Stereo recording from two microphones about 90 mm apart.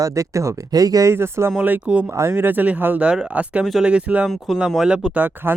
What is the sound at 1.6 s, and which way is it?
Speech, 15° right (ahead or behind).